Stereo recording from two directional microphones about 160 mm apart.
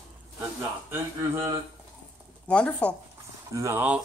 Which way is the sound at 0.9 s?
15° right (ahead or behind).